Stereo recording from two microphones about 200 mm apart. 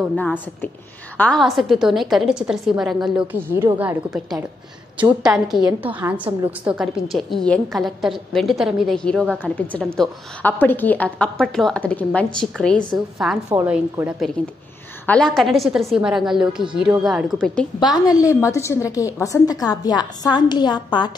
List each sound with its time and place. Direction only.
0.2 s a woman's voice: 10° left (ahead or behind)
5.6 s a woman's voice: 20° right (ahead or behind)
5.9 s a woman's voice: 10° right (ahead or behind)
17.7 s a woman's voice: 20° left (ahead or behind)